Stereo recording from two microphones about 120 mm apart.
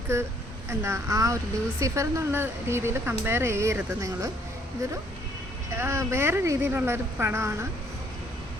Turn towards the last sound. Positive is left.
turn(degrees=-20)  # may be behind; listen again after turning